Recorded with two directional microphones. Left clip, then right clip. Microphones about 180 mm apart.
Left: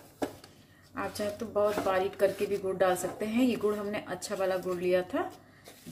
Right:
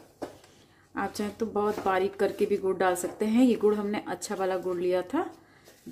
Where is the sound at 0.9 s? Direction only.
60° right (ahead or behind).